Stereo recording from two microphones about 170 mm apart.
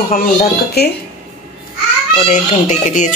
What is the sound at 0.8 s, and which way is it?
Speech, 70° left (ahead or behind).